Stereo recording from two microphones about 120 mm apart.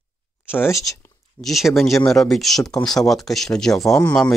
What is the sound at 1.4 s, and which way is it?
Speech, centre (ahead or behind).